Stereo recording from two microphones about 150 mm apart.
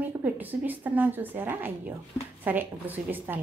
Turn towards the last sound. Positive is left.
turn(degrees=-10)  # may be behind; listen again after turning